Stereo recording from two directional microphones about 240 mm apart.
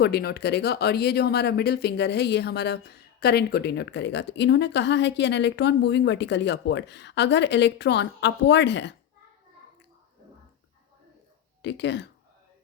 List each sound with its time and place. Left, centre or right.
0.0 s speech: left
11.6 s speech: left